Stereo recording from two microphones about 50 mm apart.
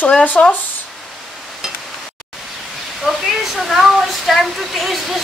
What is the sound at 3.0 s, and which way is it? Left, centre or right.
Speech, centre.